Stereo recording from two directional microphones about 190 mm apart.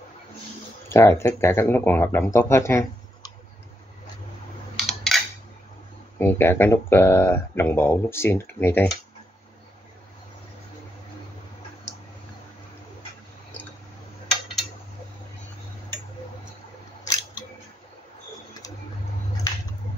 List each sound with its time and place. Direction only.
0.8 s speech: 15° left (ahead or behind)
4.7 s a sound: centre (ahead or behind)
6.1 s speech: 10° left (ahead or behind)